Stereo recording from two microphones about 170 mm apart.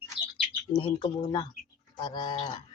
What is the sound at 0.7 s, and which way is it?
Speech, 30° left (ahead or behind).